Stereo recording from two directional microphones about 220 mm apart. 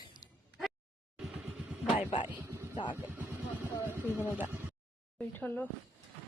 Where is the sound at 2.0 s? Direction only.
25° left (ahead or behind).